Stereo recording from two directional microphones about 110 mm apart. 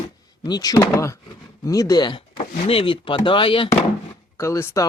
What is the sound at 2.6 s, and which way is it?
Speech, 55° left (ahead or behind).